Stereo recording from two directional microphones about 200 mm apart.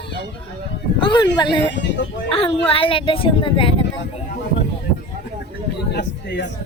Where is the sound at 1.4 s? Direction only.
25° left (ahead or behind).